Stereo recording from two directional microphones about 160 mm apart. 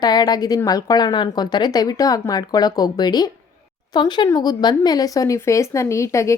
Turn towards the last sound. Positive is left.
turn(degrees=20)  # may be behind; listen again after turning